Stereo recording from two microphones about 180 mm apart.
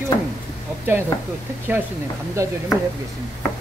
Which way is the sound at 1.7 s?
10° right (ahead or behind).